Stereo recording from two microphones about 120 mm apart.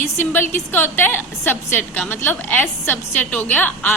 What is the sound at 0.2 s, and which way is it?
A woman's voice, 15° left (ahead or behind).